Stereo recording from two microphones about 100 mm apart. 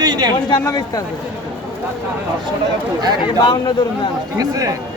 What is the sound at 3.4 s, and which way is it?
Speech, 50° left (ahead or behind).